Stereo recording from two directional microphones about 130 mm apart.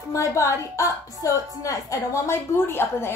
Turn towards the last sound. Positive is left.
turn(degrees=20)  # may be behind; listen again after turning